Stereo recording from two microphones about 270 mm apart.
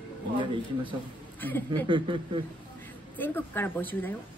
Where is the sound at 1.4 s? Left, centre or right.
Centre.